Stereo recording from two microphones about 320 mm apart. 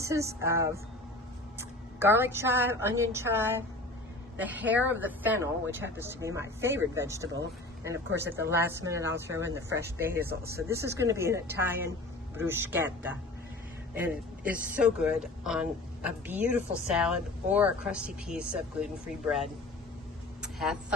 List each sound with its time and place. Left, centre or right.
0.0 s a woman's voice: centre
10.2 s speech: right
10.5 s speech: centre
20.4 s vehicle: centre